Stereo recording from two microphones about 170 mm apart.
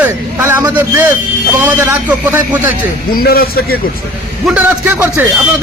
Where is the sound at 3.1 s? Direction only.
65° left (ahead or behind).